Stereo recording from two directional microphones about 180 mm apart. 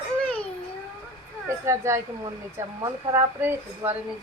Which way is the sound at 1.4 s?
15° right (ahead or behind).